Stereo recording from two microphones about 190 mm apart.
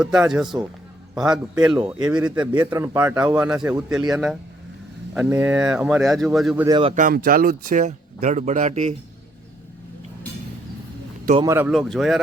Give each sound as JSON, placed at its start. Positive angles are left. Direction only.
{"t": 0.0, "sound": "a man's voice", "side_deg": -5}
{"t": 5.4, "sound": "speech", "side_deg": -15}
{"t": 5.6, "sound": "speech", "side_deg": -5}
{"t": 6.7, "sound": "speech", "side_deg": -25}
{"t": 6.9, "sound": "speech", "side_deg": -45}
{"t": 11.3, "sound": "speech", "side_deg": -15}
{"t": 11.7, "sound": "speech", "side_deg": 0}